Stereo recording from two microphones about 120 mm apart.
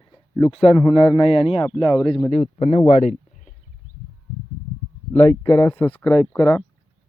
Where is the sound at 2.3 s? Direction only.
70° left (ahead or behind).